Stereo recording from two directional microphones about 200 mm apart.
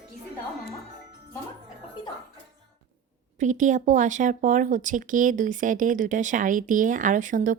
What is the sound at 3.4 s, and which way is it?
Speech, 40° right (ahead or behind).